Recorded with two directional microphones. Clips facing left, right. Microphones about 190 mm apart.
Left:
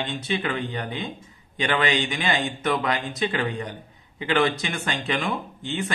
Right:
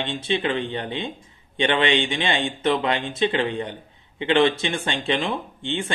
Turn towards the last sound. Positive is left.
turn(degrees=-25)  # may be behind; listen again after turning